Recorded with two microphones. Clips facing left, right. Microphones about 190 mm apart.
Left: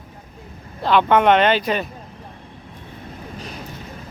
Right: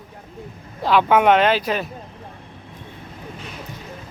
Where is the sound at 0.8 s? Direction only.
5° right (ahead or behind).